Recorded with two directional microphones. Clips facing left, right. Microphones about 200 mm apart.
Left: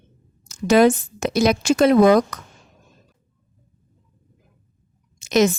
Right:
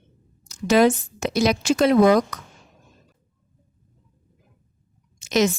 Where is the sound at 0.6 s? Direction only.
50° left (ahead or behind).